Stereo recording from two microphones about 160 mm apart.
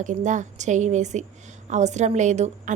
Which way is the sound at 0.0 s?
50° right (ahead or behind).